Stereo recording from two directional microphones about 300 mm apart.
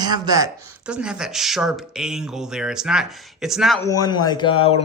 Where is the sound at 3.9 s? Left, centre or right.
Centre.